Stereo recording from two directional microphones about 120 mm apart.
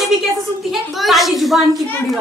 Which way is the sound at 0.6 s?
Centre (ahead or behind).